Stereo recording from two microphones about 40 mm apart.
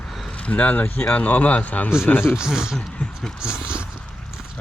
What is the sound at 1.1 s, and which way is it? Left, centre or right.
Speech, left.